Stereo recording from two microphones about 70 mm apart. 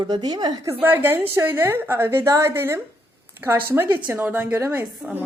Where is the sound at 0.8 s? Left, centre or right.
Right.